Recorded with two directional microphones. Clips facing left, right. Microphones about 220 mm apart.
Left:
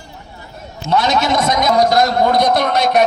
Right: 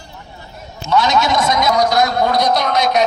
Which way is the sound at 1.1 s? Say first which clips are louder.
Even; 55° left (ahead or behind).